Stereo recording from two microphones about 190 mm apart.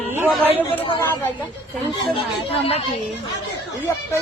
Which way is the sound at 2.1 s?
30° left (ahead or behind).